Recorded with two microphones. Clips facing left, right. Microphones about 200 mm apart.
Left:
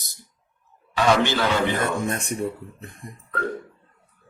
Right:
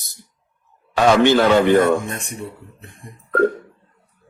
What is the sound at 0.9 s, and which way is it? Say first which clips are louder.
Speech: right 7 dB; 55° right (ahead or behind).